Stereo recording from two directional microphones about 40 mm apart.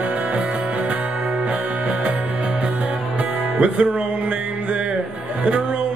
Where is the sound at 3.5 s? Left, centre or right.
Right.